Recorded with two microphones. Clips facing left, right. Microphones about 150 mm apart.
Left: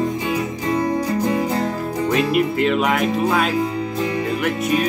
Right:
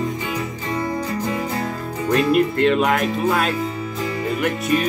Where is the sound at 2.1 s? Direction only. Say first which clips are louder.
Right 2 dB; 5° left (ahead or behind).